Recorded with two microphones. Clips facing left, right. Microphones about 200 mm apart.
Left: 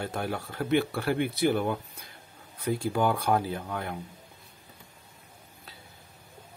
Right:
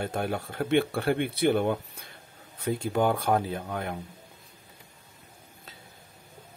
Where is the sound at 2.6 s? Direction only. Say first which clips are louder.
Right 1 dB; 25° right (ahead or behind).